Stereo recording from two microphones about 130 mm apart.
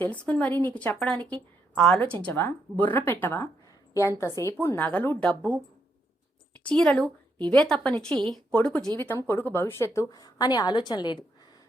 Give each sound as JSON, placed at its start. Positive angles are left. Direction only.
{"t": 0.0, "sound": "a woman's voice", "side_deg": 10}
{"t": 4.6, "sound": "speech", "side_deg": 15}
{"t": 6.7, "sound": "a woman's voice", "side_deg": 5}